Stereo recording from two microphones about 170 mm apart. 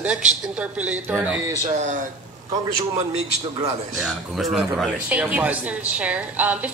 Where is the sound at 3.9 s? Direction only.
Centre (ahead or behind).